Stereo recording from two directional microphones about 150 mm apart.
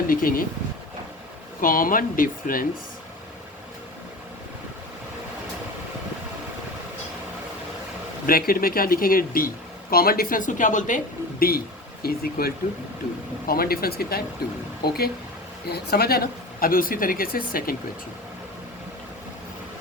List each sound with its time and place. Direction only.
0.1 s speech: 70° left (ahead or behind)
1.6 s speech: 70° left (ahead or behind)
8.3 s speech: 75° left (ahead or behind)
9.9 s speech: 85° left